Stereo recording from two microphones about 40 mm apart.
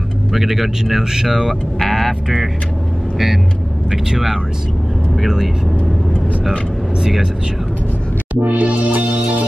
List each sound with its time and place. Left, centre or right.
0.3 s speech: centre
1.5 s speech: centre
3.9 s speech: centre
7.0 s speech: centre
8.4 s music: right